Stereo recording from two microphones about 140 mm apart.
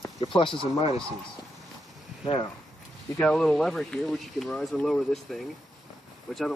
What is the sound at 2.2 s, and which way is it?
Speech, 35° left (ahead or behind).